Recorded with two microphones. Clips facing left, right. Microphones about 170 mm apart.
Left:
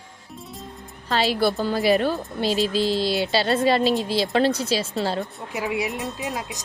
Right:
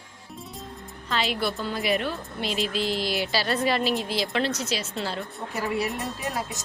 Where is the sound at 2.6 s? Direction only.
30° left (ahead or behind).